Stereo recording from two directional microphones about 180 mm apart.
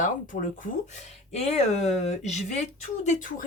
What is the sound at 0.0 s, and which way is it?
Speech, 45° left (ahead or behind).